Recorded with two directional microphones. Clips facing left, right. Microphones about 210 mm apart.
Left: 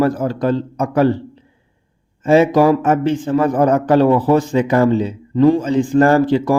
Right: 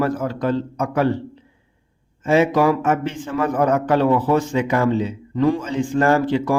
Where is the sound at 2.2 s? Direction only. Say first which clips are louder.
Left 4 dB; 35° left (ahead or behind).